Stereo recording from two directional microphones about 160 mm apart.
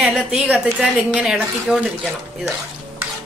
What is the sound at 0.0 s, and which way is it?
A woman's voice, 5° right (ahead or behind).